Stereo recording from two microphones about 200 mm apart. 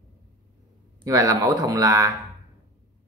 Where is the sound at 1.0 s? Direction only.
20° right (ahead or behind).